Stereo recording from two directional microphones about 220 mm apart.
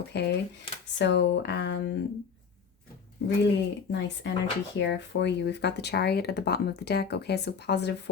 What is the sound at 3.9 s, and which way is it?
Speech, 50° left (ahead or behind).